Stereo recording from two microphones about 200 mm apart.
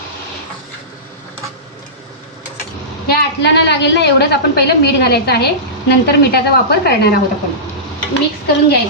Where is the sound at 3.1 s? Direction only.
55° left (ahead or behind).